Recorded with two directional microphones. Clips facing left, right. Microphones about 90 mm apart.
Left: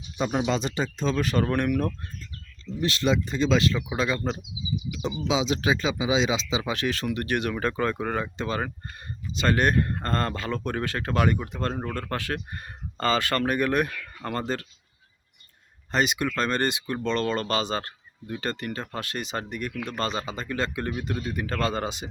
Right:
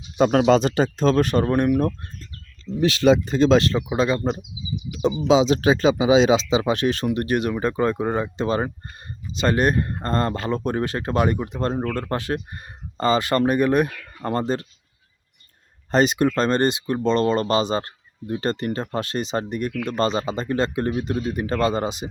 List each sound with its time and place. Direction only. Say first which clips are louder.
0.2 s speech: right 9 dB; 60° right (ahead or behind)
1.0 s speech: right 7 dB; 55° right (ahead or behind)
1.4 s speech: right 5 dB; 25° right (ahead or behind)
2.8 s speech: right 8 dB; 85° right; by 3.6 s 60° right (ahead or behind)
3.7 s speech: right 5 dB; 30° right (ahead or behind)
5.3 s speech: right 8 dB; 40° right (ahead or behind)
6.5 s speech: right 8 dB; 35° right (ahead or behind)
6.7 s speech: right 6 dB; 25° right (ahead or behind)
15.9 s speech: right 7 dB; 35° right (ahead or behind); by 22.1 s 20° right (ahead or behind)